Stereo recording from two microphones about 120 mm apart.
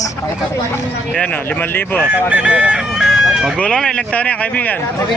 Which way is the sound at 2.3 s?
10° right (ahead or behind).